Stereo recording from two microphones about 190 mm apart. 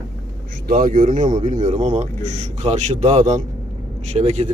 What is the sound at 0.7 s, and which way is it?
Speech, 45° right (ahead or behind).